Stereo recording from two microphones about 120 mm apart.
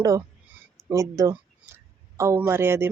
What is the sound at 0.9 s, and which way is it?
Speech, 25° right (ahead or behind).